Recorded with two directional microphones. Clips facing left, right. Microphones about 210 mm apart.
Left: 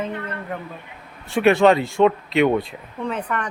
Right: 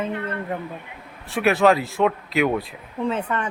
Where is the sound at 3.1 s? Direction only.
25° right (ahead or behind).